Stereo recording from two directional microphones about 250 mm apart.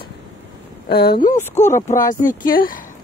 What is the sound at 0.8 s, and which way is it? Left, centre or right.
Speech, left.